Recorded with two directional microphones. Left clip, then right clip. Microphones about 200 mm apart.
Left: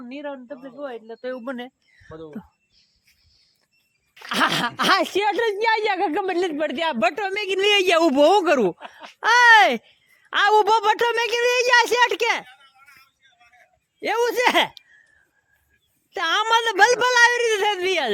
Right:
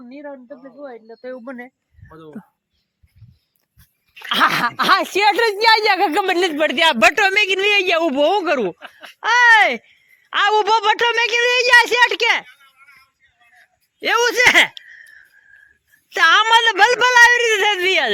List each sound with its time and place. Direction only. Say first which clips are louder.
0.0 s speech: left 1 dB; 5° right (ahead or behind)
2.0 s speech: left 2 dB; 50° right (ahead or behind)
4.3 s speech: right 5 dB; 5° left (ahead or behind)
5.1 s a woman's voice: right 6 dB; 10° right (ahead or behind)
7.6 s speech: right 1 dB; 15° left (ahead or behind)
8.8 s speech: right 2 dB; 45° right (ahead or behind)
9.2 s speech: right 1 dB; 15° left (ahead or behind)
12.5 s a sound: right 2 dB; 55° left (ahead or behind)
14.0 s speech: right 6 dB; centre (ahead or behind)
14.8 s a sound: right 13 dB; 10° left (ahead or behind)
16.0 s speech: right 8 dB; 5° right (ahead or behind)